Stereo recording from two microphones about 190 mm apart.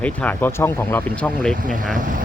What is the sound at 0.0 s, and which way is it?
Speech, 10° left (ahead or behind).